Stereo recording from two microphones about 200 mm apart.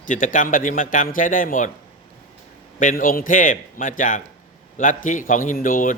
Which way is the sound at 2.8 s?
40° left (ahead or behind).